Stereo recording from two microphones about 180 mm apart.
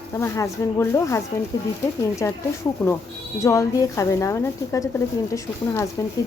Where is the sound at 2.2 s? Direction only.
15° left (ahead or behind).